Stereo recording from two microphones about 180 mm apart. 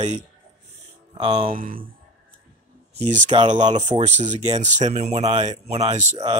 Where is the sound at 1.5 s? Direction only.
50° right (ahead or behind).